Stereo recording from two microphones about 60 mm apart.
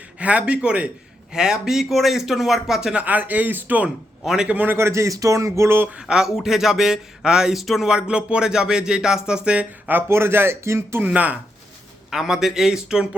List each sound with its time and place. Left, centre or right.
0.2 s speech: right; by 2.9 s centre
2.9 s speech: right
3.8 s a man's voice: centre
4.4 s a man's voice: right
4.9 s speech: right
5.1 s a sound: right
5.6 s a man's voice: right
5.9 s a man's voice: centre
10.1 s speech: right
11.0 s speech: right
12.1 s a man's voice: centre